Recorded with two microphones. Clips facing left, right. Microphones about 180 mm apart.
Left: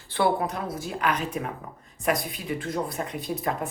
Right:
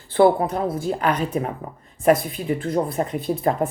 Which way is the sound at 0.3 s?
30° right (ahead or behind).